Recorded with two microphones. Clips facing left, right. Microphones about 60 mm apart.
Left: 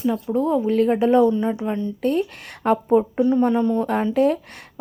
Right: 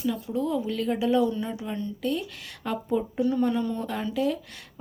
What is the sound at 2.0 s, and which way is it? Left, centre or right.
Speech, left.